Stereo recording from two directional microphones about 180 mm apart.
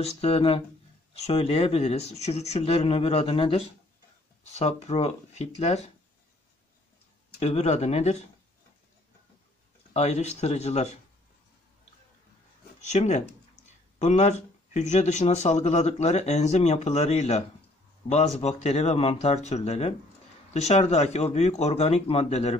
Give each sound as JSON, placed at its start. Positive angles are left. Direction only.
{"t": 0.0, "sound": "speech", "side_deg": 35}
{"t": 7.3, "sound": "speech", "side_deg": 35}
{"t": 9.9, "sound": "speech", "side_deg": 35}
{"t": 12.8, "sound": "speech", "side_deg": 40}